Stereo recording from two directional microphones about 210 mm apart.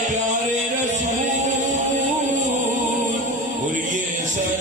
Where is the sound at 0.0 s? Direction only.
35° right (ahead or behind).